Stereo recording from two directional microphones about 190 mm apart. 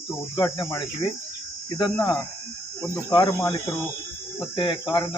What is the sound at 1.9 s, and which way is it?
Speech, 5° left (ahead or behind).